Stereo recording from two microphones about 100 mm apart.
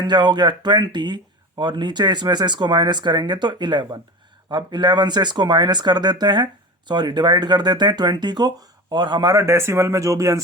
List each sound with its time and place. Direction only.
0.0 s speech: 50° right (ahead or behind)
9.3 s speech: 30° right (ahead or behind)